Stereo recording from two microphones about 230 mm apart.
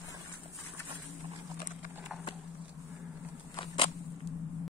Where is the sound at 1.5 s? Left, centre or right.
Left.